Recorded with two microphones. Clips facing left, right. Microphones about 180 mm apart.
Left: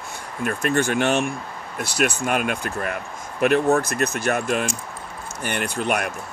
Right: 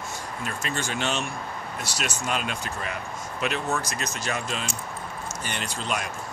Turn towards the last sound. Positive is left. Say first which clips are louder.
# left 7 dB
turn(degrees=60)  # may be behind; listen again after turning